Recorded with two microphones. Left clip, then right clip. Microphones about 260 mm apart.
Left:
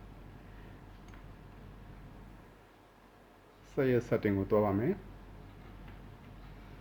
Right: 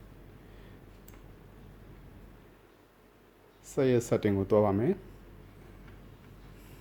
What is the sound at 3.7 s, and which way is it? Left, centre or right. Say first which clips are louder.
Speech: right 3 dB; right.